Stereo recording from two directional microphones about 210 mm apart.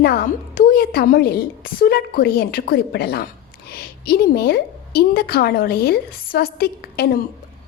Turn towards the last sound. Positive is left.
turn(degrees=50)  # may be behind; listen again after turning